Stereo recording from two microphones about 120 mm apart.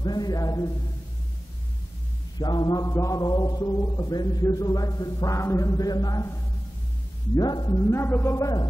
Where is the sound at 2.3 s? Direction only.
35° left (ahead or behind).